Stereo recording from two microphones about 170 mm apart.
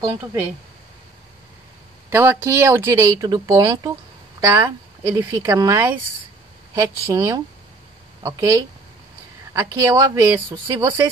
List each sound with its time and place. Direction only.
0.0 s speech: 20° right (ahead or behind)
2.0 s speech: 15° right (ahead or behind)